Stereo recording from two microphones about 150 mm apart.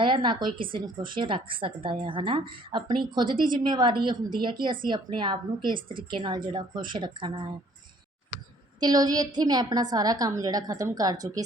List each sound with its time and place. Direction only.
0.0 s a woman's voice: 35° right (ahead or behind)
8.8 s a woman's voice: 25° right (ahead or behind)